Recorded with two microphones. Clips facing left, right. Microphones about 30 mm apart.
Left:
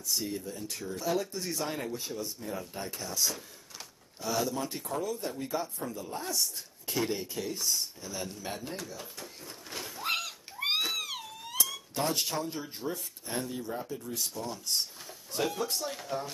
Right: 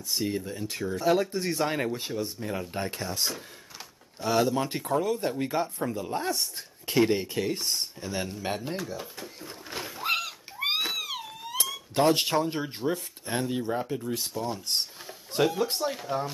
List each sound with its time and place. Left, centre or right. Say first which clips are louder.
0.0 s speech: right 4 dB; right
9.2 s a sound: right 4 dB; right
10.1 s wail: right 4 dB; centre
11.9 s speech: right 10 dB; right; by 16.3 s centre